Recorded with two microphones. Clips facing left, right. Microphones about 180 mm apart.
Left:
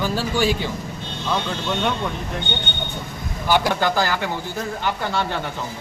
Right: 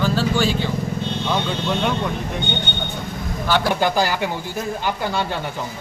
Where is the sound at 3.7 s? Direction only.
15° right (ahead or behind).